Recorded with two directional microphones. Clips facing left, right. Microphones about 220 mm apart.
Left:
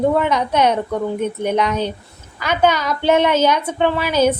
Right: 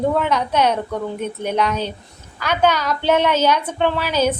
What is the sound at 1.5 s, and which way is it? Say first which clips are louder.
A woman's voice: left 2 dB; 10° left (ahead or behind).